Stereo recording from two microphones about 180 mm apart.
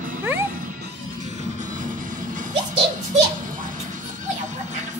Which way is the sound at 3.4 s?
50° right (ahead or behind).